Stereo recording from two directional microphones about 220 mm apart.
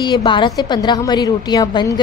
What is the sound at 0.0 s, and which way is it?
A woman's voice, 20° left (ahead or behind).